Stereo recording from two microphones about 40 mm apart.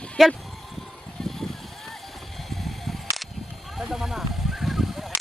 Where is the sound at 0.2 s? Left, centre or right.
Centre.